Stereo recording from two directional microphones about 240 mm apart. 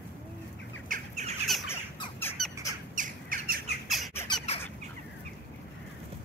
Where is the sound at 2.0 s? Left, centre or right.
Centre.